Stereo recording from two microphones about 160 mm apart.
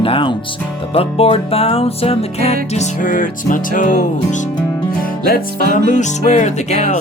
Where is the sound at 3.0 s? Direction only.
60° left (ahead or behind).